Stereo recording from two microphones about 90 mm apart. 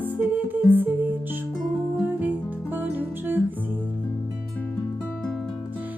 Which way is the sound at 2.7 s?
20° right (ahead or behind).